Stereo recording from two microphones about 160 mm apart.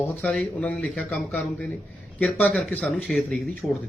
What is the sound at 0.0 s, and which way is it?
Speech, 5° left (ahead or behind).